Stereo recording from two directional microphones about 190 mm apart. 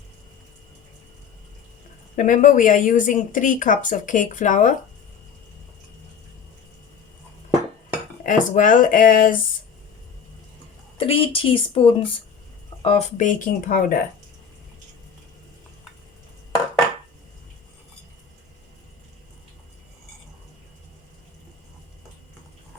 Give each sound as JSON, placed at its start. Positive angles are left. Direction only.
{"t": 2.1, "sound": "speech", "side_deg": 45}
{"t": 8.2, "sound": "speech", "side_deg": 45}
{"t": 10.9, "sound": "a woman's voice", "side_deg": 30}